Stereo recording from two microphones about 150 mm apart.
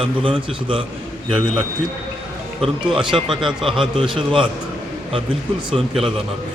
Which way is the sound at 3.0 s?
35° right (ahead or behind).